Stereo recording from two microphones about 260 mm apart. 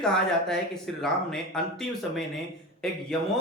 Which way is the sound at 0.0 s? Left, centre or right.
Centre.